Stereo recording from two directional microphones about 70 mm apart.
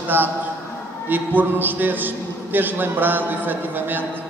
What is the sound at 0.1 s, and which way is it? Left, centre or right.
A man's voice, right.